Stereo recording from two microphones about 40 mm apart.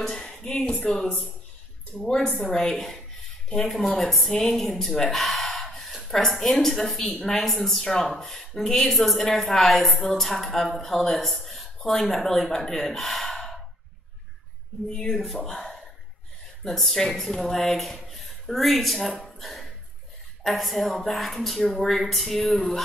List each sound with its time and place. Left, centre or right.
0.0 s speech: centre
1.9 s speech: centre
5.1 s a sound: centre
6.0 s speech: centre
14.9 s speech: centre
15.4 s speech: centre
19.2 s a sound: centre
20.4 s speech: centre
22.5 s speech: centre